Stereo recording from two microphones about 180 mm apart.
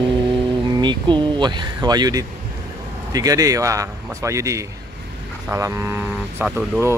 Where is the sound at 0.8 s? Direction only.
25° right (ahead or behind).